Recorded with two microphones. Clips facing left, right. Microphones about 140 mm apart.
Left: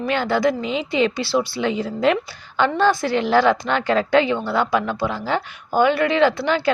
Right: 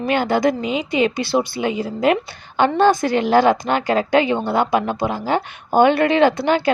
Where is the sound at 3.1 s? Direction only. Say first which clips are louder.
Right 2 dB; 15° right (ahead or behind).